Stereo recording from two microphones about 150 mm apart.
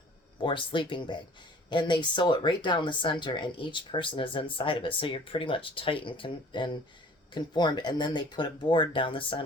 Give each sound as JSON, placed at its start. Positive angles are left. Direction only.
{"t": 0.3, "sound": "speech", "side_deg": 30}